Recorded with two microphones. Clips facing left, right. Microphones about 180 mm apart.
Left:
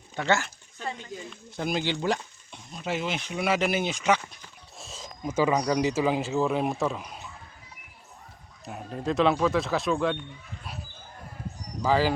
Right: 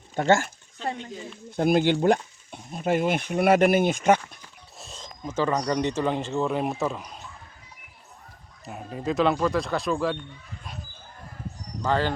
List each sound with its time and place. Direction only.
0.2 s speech: 45° right (ahead or behind)
4.8 s speech: centre (ahead or behind)
8.6 s speech: centre (ahead or behind)
11.8 s speech: 5° left (ahead or behind)